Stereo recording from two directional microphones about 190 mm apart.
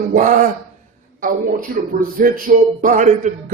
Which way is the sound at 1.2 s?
45° right (ahead or behind).